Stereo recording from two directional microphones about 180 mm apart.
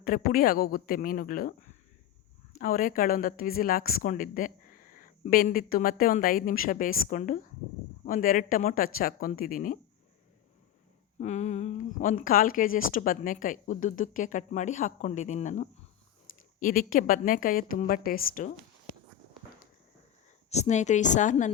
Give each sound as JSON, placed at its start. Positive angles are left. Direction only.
{"t": 0.0, "sound": "a woman's voice", "side_deg": 55}
{"t": 11.2, "sound": "a woman's voice", "side_deg": 40}
{"t": 20.5, "sound": "a woman's voice", "side_deg": 40}